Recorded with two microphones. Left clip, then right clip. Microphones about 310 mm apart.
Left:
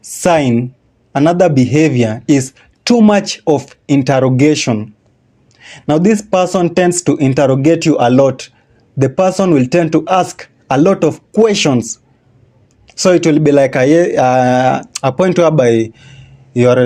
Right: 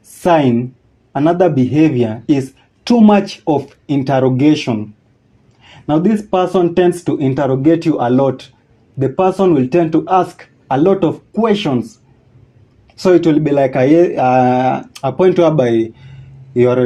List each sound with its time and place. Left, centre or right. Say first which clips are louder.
0.2 s speech: even; left
12.9 s speech: left 1 dB; left